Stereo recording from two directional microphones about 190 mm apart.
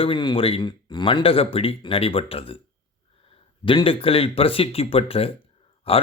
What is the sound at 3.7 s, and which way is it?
A man's voice, 30° left (ahead or behind).